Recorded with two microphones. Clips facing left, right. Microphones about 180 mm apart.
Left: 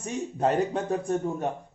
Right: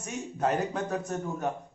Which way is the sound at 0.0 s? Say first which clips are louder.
Left 4 dB; 30° left (ahead or behind).